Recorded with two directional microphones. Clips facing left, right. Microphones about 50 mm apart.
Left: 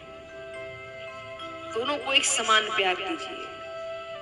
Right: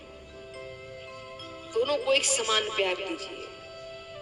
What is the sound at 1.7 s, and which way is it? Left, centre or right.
A man's voice, left.